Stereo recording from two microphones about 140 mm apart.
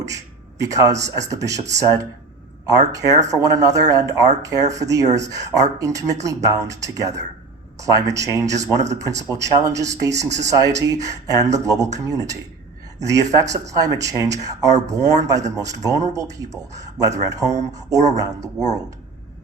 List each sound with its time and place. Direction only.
0.6 s speech: 25° right (ahead or behind)